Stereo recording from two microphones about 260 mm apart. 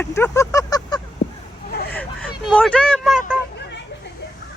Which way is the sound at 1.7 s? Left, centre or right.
Left.